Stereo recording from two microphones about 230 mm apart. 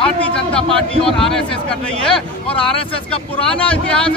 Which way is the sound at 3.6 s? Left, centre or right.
Centre.